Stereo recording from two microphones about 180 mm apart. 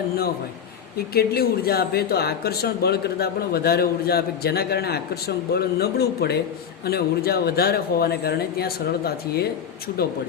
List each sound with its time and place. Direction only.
0.9 s speech: 60° left (ahead or behind)